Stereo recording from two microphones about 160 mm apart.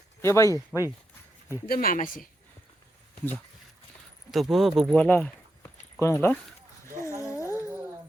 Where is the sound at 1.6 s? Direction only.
65° left (ahead or behind).